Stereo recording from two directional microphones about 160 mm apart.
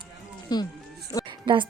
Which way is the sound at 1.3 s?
30° right (ahead or behind).